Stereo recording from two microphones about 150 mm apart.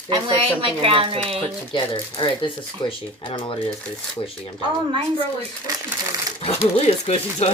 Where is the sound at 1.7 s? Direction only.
30° left (ahead or behind).